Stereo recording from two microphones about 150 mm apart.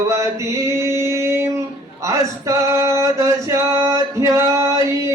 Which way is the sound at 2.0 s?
20° right (ahead or behind).